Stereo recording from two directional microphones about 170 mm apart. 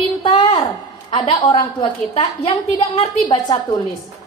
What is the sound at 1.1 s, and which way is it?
A woman's voice, 30° left (ahead or behind).